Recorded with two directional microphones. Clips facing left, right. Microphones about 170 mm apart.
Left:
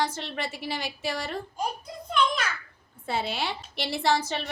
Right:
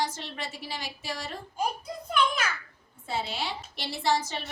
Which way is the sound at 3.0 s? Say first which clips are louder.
Left 3 dB; 60° left (ahead or behind).